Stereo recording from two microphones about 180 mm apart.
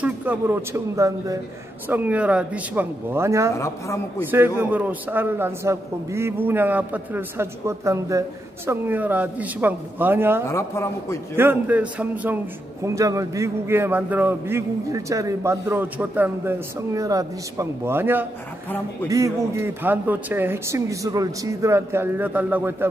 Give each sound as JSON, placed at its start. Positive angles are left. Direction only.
{"t": 0.0, "sound": "a man's voice", "side_deg": -10}
{"t": 3.5, "sound": "a woman's voice", "side_deg": 15}
{"t": 4.6, "sound": "a man's voice", "side_deg": -10}
{"t": 10.5, "sound": "a woman's voice", "side_deg": 15}
{"t": 11.3, "sound": "a man's voice", "side_deg": -10}